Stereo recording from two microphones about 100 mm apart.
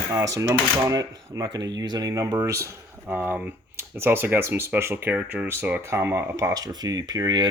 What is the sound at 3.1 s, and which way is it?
Speech, 20° right (ahead or behind).